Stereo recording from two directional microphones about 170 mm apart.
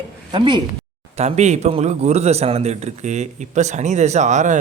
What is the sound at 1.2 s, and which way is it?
A man's voice, 40° right (ahead or behind).